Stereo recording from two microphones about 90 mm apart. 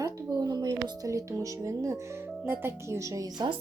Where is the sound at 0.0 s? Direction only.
45° right (ahead or behind).